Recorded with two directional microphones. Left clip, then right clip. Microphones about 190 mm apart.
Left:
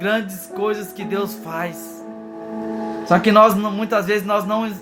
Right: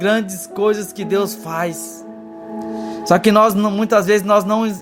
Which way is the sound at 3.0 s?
60° right (ahead or behind).